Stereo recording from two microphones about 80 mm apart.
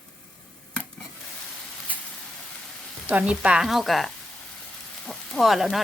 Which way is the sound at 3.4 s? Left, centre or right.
Centre.